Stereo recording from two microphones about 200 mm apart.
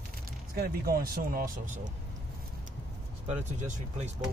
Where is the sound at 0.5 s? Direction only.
50° right (ahead or behind).